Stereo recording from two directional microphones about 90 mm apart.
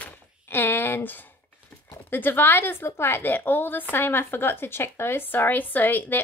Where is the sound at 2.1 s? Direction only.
25° left (ahead or behind).